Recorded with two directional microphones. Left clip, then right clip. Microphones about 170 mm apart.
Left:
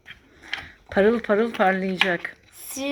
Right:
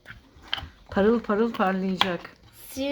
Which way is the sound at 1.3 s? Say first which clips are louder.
Left 4 dB; 10° left (ahead or behind).